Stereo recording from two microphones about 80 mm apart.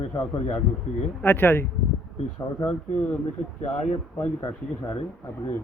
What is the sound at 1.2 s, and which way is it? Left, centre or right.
Speech, left.